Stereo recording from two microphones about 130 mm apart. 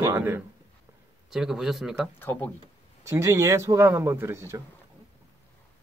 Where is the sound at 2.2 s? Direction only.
15° left (ahead or behind).